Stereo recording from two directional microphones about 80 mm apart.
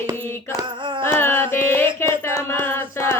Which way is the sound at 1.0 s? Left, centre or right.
Left.